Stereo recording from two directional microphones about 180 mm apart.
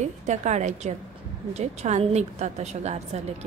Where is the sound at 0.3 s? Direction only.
40° right (ahead or behind).